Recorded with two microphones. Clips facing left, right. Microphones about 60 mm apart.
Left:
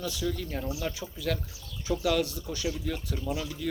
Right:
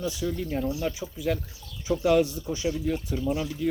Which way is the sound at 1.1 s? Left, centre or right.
Centre.